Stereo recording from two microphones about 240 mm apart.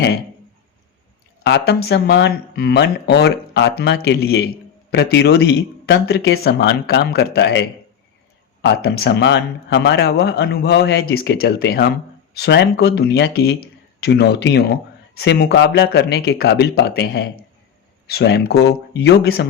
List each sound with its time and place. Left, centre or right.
1.5 s speech: left